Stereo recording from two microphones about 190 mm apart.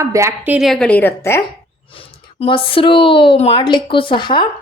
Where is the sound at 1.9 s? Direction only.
30° left (ahead or behind).